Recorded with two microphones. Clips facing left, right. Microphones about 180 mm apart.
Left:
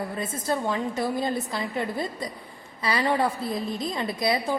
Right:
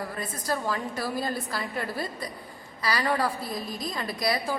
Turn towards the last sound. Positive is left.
turn(degrees=25)  # may be behind; listen again after turning